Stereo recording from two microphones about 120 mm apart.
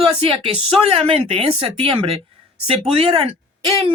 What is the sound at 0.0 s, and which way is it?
Speech, 50° right (ahead or behind).